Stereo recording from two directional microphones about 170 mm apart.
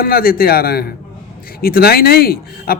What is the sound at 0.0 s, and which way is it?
Speech, 60° left (ahead or behind).